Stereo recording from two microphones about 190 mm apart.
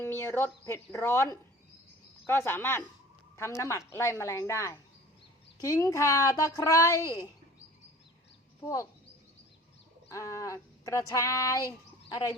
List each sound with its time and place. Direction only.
0.0 s speech: 15° left (ahead or behind)
10.1 s speech: 15° left (ahead or behind)